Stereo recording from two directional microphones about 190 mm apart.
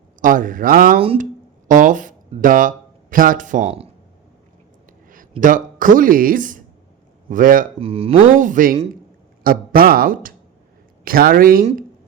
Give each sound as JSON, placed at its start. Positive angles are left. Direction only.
{"t": 0.2, "sound": "speech", "side_deg": -45}
{"t": 0.9, "sound": "speech", "side_deg": -30}
{"t": 1.2, "sound": "speech", "side_deg": -45}
{"t": 5.4, "sound": "speech", "side_deg": -45}
{"t": 7.8, "sound": "speech", "side_deg": -30}
{"t": 8.4, "sound": "speech", "side_deg": -45}